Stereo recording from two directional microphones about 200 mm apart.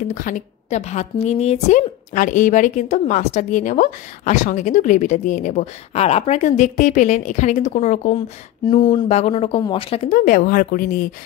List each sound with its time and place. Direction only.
0.1 s a woman's voice: 40° left (ahead or behind)
8.6 s a woman's voice: 25° left (ahead or behind); by 11.1 s 45° left (ahead or behind)